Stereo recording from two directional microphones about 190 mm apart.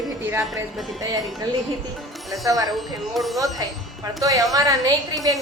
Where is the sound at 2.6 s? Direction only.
Centre (ahead or behind).